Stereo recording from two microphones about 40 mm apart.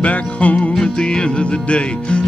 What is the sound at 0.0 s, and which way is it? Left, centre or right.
Music, left.